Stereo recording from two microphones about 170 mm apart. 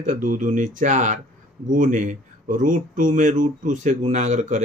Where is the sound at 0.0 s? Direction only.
50° right (ahead or behind).